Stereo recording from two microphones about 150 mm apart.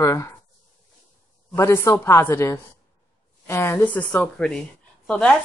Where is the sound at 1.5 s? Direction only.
20° left (ahead or behind).